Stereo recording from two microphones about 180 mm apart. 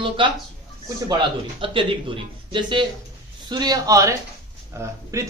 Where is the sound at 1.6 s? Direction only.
30° right (ahead or behind).